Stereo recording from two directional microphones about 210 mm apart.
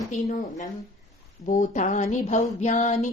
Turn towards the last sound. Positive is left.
turn(degrees=35)  # may be behind; listen again after turning